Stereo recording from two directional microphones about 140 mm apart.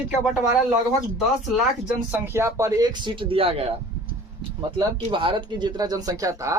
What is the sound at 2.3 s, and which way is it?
Speech, 20° right (ahead or behind).